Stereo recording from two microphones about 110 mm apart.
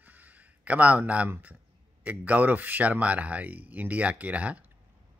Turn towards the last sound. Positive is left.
turn(degrees=-10)  # may be behind; listen again after turning